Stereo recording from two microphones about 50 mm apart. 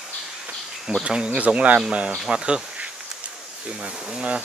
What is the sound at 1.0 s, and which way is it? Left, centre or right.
Speech, centre.